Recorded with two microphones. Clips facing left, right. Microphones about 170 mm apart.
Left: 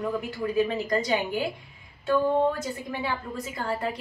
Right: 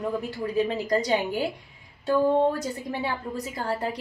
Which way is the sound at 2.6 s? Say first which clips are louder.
Right 2 dB; 35° right (ahead or behind).